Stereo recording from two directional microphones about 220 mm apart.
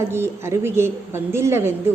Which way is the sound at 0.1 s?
10° right (ahead or behind).